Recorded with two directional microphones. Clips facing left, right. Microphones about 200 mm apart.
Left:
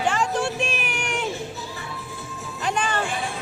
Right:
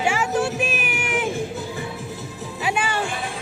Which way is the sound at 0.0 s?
10° right (ahead or behind).